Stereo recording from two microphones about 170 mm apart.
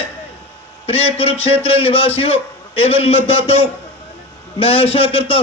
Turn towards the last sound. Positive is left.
turn(degrees=30)  # may be behind; listen again after turning